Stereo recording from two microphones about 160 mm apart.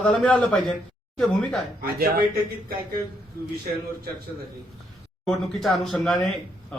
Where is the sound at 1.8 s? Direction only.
75° right (ahead or behind).